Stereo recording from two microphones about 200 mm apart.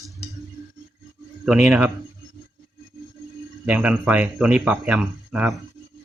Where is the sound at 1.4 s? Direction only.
5° right (ahead or behind).